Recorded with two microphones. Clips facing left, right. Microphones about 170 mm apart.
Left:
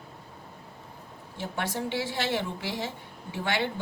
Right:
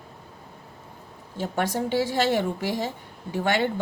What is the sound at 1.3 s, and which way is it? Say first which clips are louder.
A woman's voice: right 6 dB; 45° right (ahead or behind).